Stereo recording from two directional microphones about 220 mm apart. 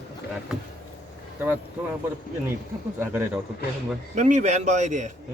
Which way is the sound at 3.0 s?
10° right (ahead or behind).